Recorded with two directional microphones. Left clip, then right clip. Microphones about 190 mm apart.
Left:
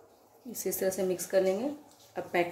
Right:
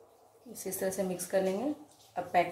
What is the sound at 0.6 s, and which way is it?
Speech, 40° left (ahead or behind).